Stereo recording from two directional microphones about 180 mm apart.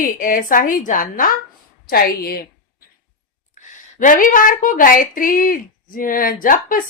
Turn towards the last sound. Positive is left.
turn(degrees=50)  # may be behind; listen again after turning